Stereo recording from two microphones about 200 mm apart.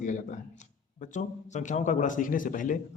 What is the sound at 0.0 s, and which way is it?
A man's voice, 40° left (ahead or behind).